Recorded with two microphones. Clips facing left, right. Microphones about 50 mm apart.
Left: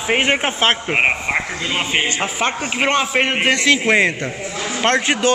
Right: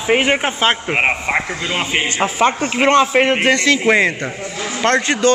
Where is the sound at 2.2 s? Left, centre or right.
Centre.